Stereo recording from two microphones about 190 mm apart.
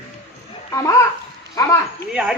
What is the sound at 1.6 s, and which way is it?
Speech, 15° left (ahead or behind).